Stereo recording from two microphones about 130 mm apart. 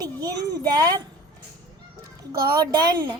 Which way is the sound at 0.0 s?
30° right (ahead or behind).